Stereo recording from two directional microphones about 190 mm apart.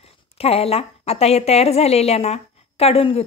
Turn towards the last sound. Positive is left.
turn(degrees=30)  # may be behind; listen again after turning